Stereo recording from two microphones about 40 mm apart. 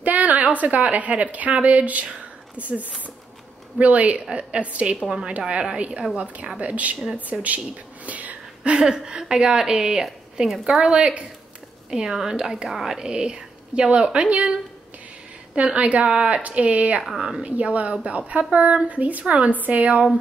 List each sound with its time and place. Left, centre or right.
0.0 s a woman's voice: right
2.0 s a sound: right
3.8 s a woman's voice: right
7.3 s a sound: right
8.9 s a woman's voice: centre
11.9 s a woman's voice: centre; by 14.5 s right
15.5 s a woman's voice: right